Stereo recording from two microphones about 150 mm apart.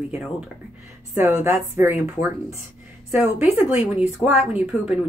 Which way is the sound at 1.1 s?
15° right (ahead or behind).